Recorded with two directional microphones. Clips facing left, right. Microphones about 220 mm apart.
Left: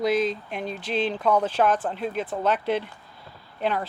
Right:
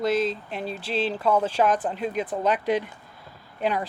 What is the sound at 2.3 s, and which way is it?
Speech, 10° right (ahead or behind).